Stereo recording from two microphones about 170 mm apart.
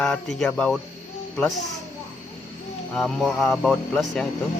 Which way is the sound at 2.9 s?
Centre (ahead or behind).